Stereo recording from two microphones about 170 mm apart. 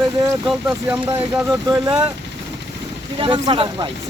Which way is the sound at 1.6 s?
20° right (ahead or behind).